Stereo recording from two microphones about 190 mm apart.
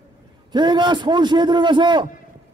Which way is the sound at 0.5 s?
25° right (ahead or behind).